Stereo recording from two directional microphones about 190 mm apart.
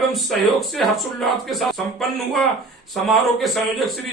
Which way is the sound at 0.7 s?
Centre (ahead or behind).